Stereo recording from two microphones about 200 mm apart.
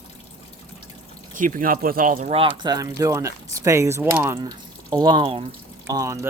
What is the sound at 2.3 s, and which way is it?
Speech, 25° right (ahead or behind).